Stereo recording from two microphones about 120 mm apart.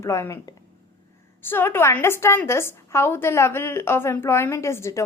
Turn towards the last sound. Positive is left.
turn(degrees=25)  # may be behind; listen again after turning